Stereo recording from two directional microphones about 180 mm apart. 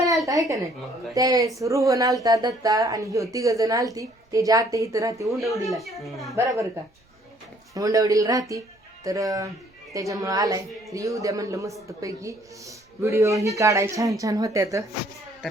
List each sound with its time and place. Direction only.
0.3 s speech: 20° right (ahead or behind)
5.6 s a woman's voice: centre (ahead or behind)
6.3 s speech: 15° right (ahead or behind)
7.7 s speech: 20° right (ahead or behind)